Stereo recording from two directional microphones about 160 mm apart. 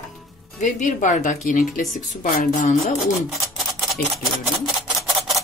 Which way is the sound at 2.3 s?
65° left (ahead or behind).